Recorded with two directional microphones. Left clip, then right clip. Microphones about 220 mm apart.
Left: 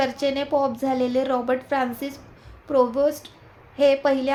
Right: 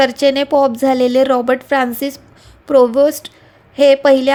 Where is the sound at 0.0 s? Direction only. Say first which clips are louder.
Right 11 dB; 40° right (ahead or behind).